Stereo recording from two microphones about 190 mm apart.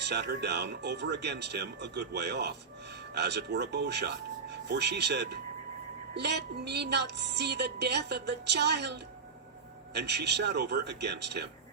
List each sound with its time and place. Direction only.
0.0 s speech: 60° right (ahead or behind)